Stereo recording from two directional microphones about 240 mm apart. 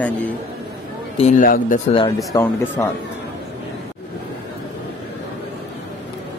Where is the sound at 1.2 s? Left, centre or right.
Left.